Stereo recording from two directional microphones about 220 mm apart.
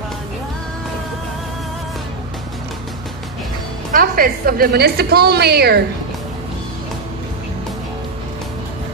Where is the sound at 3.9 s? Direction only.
40° right (ahead or behind).